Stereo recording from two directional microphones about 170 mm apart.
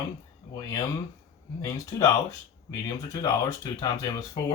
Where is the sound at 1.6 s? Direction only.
20° left (ahead or behind).